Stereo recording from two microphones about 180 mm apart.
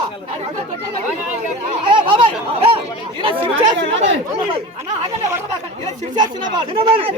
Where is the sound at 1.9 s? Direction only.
30° right (ahead or behind).